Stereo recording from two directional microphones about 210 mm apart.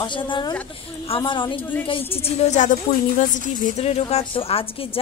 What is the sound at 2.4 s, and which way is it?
A woman's voice, 35° left (ahead or behind).